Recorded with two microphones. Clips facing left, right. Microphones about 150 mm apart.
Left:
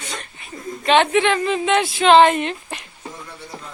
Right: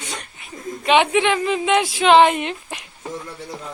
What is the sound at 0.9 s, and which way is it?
Speech, 10° right (ahead or behind).